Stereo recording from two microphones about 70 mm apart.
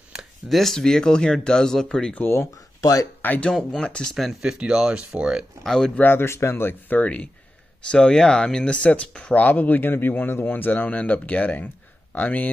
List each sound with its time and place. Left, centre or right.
0.1 s a sound: centre
0.6 s speech: centre
2.1 s speech: left
2.8 s speech: left
3.2 s speech: left
3.5 s speech: centre
5.6 s speech: centre
5.9 s speech: left